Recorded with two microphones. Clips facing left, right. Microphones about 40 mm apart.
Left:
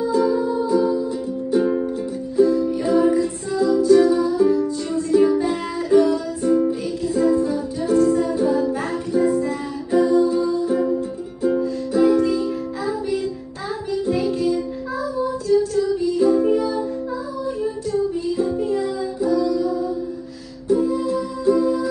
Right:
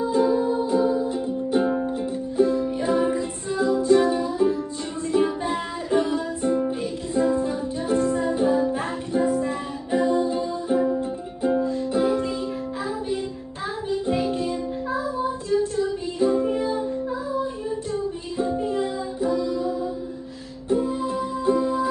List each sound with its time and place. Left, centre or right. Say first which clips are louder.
0.1 s music: left 1 dB; right
14.0 s music: left 5 dB; right
18.4 s music: left 1 dB; right
20.7 s music: left 4 dB; right